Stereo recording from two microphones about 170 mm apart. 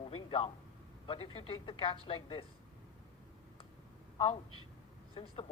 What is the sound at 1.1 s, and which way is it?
A man's voice, 35° left (ahead or behind).